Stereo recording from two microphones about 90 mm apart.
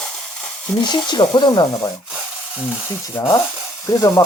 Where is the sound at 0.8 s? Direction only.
55° left (ahead or behind).